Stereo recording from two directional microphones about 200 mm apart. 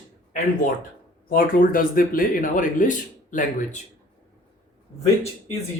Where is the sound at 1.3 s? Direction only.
45° left (ahead or behind).